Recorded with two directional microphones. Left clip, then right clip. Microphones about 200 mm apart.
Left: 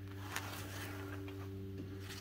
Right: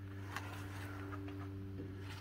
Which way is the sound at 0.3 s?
60° left (ahead or behind).